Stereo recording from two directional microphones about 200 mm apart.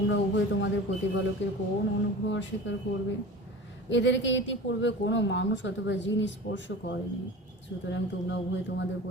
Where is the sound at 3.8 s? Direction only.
65° left (ahead or behind).